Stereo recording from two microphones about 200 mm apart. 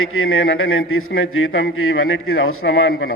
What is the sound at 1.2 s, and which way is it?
A man's voice, 90° left.